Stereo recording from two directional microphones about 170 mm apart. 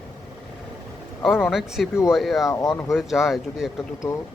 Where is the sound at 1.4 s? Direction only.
Centre (ahead or behind).